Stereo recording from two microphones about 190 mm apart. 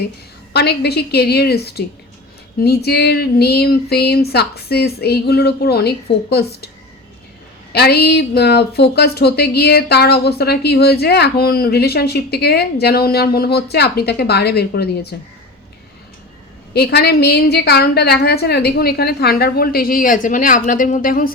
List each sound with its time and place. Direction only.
0.5 s a woman's voice: 60° left (ahead or behind)
7.7 s a woman's voice: 60° left (ahead or behind)
16.7 s a woman's voice: 55° left (ahead or behind)